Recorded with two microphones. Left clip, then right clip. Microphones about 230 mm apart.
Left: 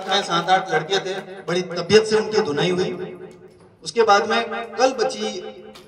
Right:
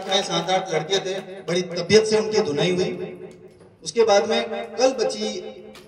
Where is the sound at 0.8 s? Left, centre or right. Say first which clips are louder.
Left 1 dB; left.